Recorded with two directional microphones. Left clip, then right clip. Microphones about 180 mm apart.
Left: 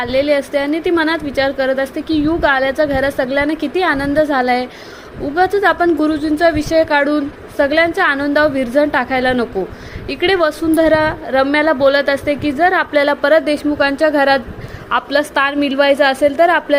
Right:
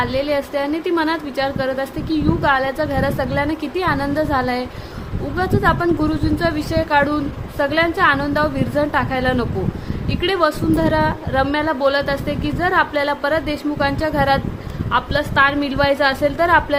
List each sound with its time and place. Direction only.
0.0 s a woman's voice: 20° left (ahead or behind)